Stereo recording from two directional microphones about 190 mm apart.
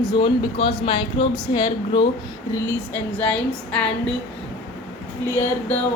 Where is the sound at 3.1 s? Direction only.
5° left (ahead or behind).